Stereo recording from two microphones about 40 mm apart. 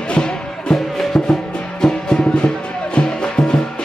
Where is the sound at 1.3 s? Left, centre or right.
Centre.